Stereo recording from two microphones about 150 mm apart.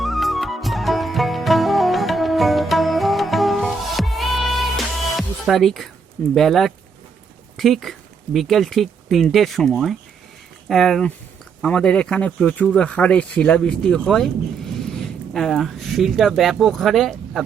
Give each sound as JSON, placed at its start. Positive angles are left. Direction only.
{"t": 0.0, "sound": "music", "side_deg": 0}
{"t": 6.3, "sound": "speech", "side_deg": 0}